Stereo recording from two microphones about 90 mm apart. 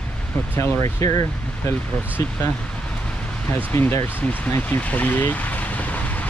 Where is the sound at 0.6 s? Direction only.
30° left (ahead or behind).